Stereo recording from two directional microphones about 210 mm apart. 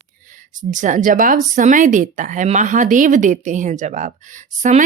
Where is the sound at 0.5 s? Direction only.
35° right (ahead or behind).